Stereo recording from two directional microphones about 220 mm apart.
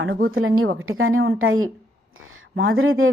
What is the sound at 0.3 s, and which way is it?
A woman's voice, 70° right (ahead or behind).